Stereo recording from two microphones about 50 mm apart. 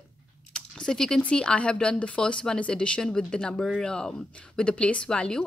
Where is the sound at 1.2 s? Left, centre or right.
Left.